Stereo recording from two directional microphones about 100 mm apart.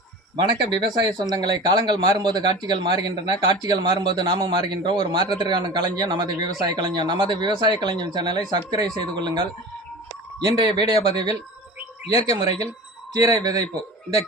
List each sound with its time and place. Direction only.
0.9 s a man's voice: 40° right (ahead or behind)